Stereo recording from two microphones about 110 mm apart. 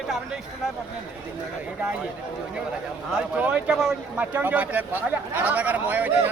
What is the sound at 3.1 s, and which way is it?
Speech, 10° right (ahead or behind).